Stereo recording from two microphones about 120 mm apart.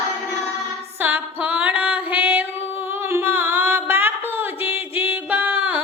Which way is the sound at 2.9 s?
20° right (ahead or behind).